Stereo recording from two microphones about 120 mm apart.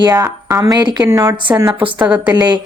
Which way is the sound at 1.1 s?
20° right (ahead or behind).